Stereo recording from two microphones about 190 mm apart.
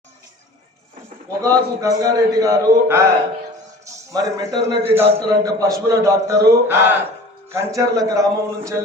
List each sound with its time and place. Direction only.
1.4 s a man's voice: 15° right (ahead or behind)
4.1 s a man's voice: 20° right (ahead or behind)